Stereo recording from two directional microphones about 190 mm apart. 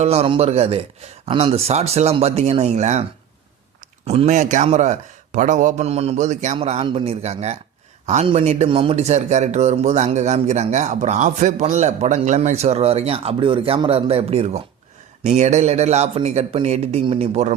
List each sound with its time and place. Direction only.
0.0 s a man's voice: 35° right (ahead or behind)
4.0 s a man's voice: 35° right (ahead or behind)